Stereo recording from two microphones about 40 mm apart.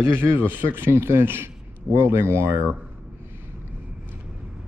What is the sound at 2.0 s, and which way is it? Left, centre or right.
Speech, right.